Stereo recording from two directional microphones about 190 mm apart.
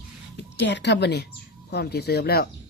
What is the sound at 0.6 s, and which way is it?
Speech, 65° left (ahead or behind).